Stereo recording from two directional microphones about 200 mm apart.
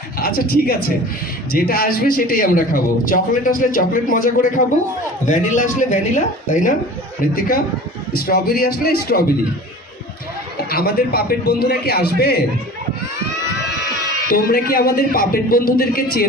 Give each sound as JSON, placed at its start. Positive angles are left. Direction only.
{"t": 0.2, "sound": "a man's voice", "side_deg": 50}
{"t": 10.7, "sound": "a man's voice", "side_deg": 50}
{"t": 14.3, "sound": "a man's voice", "side_deg": 50}